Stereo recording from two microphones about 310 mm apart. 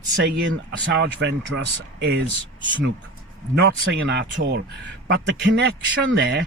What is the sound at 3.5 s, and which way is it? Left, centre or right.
A man's voice, right.